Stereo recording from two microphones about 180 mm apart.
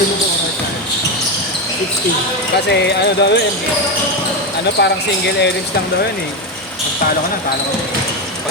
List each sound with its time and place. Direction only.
2.6 s speech: 70° left (ahead or behind)
4.8 s speech: 70° left (ahead or behind)